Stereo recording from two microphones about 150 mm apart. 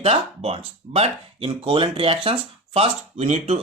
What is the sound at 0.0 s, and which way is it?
Speech, 40° right (ahead or behind).